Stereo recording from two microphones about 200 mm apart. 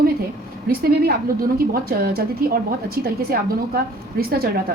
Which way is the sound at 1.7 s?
50° right (ahead or behind).